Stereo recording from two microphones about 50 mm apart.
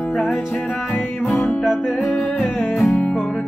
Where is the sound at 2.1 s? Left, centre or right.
Centre.